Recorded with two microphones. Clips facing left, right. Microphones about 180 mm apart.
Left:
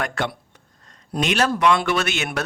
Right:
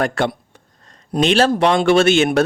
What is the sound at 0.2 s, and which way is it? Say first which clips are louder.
A man's voice: right 6 dB; 30° right (ahead or behind).